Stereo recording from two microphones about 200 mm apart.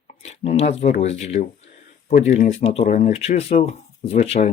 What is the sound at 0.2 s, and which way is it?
Speech, 35° left (ahead or behind).